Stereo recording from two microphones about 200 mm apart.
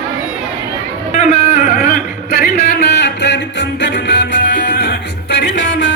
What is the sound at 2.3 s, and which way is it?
Music, 50° left (ahead or behind).